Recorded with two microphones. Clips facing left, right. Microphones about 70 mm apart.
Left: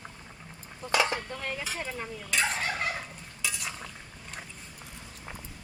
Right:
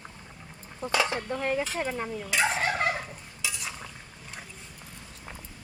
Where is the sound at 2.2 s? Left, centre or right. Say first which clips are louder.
Right 1 dB; centre.